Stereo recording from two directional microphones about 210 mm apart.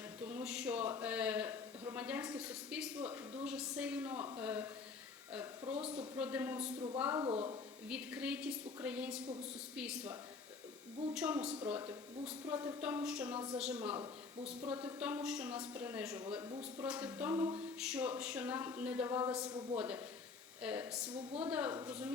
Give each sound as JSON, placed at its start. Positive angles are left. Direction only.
{"t": 0.3, "sound": "speech", "side_deg": -5}
{"t": 5.6, "sound": "speech", "side_deg": -30}
{"t": 6.1, "sound": "speech", "side_deg": -5}
{"t": 7.9, "sound": "a woman's voice", "side_deg": -5}
{"t": 16.5, "sound": "speech", "side_deg": -25}
{"t": 16.8, "sound": "speech", "side_deg": -5}
{"t": 17.7, "sound": "a woman's voice", "side_deg": -5}